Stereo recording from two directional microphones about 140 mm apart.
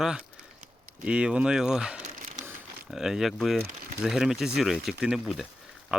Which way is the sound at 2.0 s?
65° right (ahead or behind).